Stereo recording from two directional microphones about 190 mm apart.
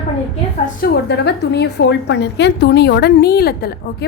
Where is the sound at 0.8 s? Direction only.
55° left (ahead or behind).